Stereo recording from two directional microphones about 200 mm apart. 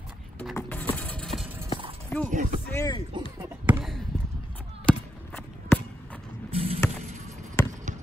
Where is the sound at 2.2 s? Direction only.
40° right (ahead or behind).